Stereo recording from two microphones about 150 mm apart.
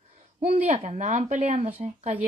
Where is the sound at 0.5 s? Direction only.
45° right (ahead or behind).